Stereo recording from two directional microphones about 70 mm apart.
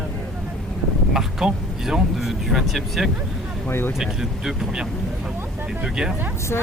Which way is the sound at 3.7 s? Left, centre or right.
Left.